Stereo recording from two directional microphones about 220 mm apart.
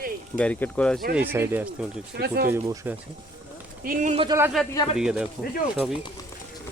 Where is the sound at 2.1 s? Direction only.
50° right (ahead or behind).